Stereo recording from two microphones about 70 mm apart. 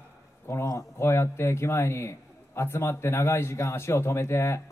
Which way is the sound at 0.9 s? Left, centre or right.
Left.